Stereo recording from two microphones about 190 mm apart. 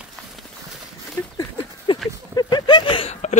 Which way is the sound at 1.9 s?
25° left (ahead or behind).